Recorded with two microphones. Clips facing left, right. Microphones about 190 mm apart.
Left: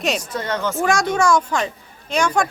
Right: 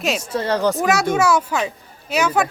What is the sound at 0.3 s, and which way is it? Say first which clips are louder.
Speech: right 5 dB; 30° right (ahead or behind).